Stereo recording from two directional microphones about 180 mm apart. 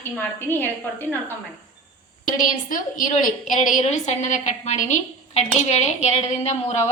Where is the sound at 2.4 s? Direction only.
50° left (ahead or behind).